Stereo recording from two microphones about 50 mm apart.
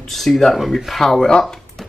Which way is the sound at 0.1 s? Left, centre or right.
Centre.